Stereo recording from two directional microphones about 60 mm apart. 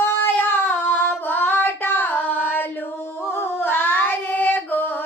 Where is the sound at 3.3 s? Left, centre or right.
Left.